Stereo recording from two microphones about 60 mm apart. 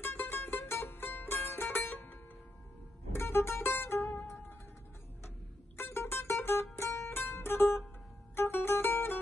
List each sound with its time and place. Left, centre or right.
0.0 s music: left
3.2 s music: left
5.8 s mandolin: left
8.4 s music: left